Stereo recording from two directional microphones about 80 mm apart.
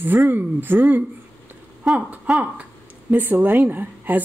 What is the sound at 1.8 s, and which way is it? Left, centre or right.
Speech, centre.